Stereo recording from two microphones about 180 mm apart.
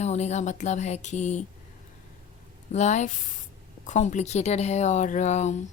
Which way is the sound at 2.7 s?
40° left (ahead or behind).